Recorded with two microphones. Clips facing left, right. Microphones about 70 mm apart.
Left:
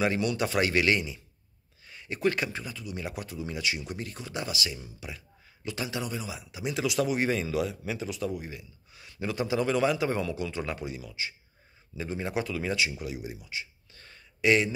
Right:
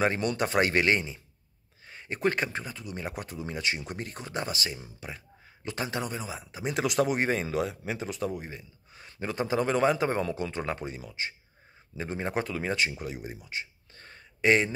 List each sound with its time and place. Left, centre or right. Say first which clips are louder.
0.0 s speech: even; right